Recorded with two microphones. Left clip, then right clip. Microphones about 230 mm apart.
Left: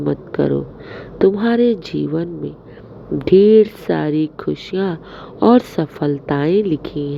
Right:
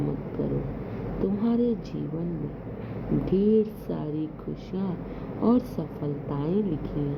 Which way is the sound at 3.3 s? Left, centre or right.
Left.